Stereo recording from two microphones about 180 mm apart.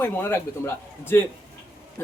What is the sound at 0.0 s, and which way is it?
A man's voice, 15° left (ahead or behind).